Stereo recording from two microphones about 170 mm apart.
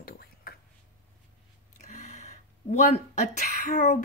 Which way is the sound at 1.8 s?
45° left (ahead or behind).